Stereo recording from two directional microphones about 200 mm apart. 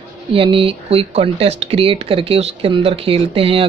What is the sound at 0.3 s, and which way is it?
Speech, 25° right (ahead or behind).